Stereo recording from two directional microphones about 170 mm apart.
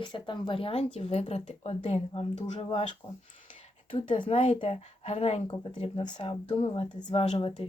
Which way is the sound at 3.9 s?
30° left (ahead or behind).